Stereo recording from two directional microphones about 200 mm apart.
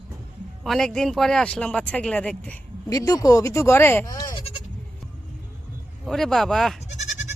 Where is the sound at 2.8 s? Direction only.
20° left (ahead or behind).